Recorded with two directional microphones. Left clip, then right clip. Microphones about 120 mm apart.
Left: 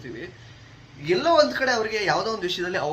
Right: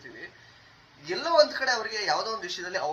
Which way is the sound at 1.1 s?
20° left (ahead or behind).